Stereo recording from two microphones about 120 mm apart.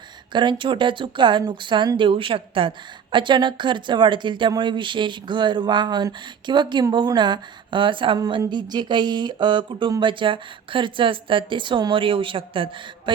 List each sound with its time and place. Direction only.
0.3 s a woman's voice: 40° right (ahead or behind)